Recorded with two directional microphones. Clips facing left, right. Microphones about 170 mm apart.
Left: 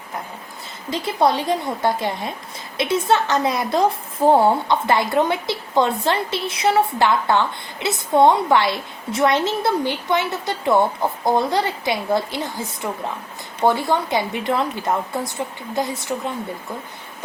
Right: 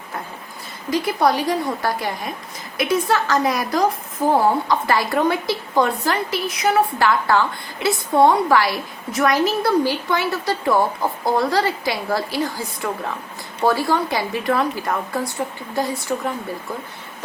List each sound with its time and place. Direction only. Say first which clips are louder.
0.9 s a woman's voice: right 1 dB; 25° left (ahead or behind)